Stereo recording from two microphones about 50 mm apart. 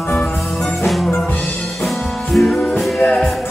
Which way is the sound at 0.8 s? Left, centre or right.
Centre.